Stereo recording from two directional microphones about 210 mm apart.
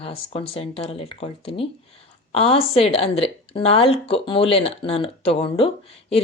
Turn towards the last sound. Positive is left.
turn(degrees=25)  # may be behind; listen again after turning